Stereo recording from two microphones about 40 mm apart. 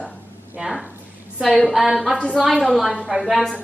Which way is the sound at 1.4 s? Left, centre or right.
Centre.